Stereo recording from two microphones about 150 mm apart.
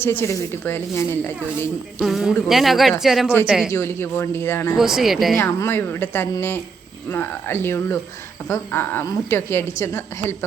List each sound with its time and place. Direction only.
0.0 s a woman's voice: 15° left (ahead or behind)
2.0 s speech: 5° right (ahead or behind)
3.7 s a woman's voice: 15° left (ahead or behind)
4.8 s speech: centre (ahead or behind)
5.4 s a woman's voice: 15° left (ahead or behind)